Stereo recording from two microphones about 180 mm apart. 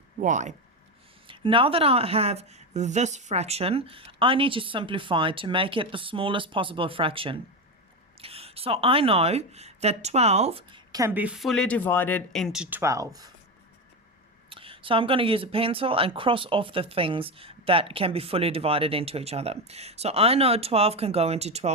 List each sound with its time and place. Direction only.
0.2 s speech: 45° right (ahead or behind)
1.3 s a woman's voice: 30° right (ahead or behind)
11.1 s speech: 5° right (ahead or behind)
12.8 s a woman's voice: 20° right (ahead or behind)
14.5 s speech: 30° right (ahead or behind)